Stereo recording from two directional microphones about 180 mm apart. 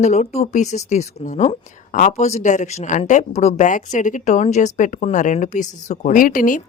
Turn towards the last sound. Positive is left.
turn(degrees=50)  # may be behind; listen again after turning